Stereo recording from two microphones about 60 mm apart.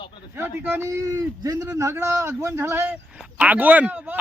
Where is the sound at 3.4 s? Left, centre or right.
Right.